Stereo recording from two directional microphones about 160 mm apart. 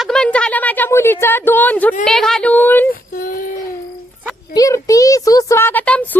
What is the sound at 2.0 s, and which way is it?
Speech, 5° left (ahead or behind).